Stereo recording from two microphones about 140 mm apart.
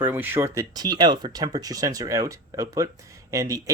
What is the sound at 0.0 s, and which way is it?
Speech, 15° right (ahead or behind).